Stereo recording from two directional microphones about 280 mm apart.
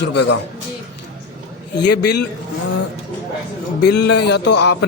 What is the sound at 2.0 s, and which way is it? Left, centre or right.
Speech, left.